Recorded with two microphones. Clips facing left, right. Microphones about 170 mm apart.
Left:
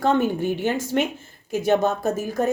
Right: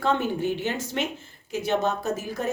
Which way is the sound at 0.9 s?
50° left (ahead or behind).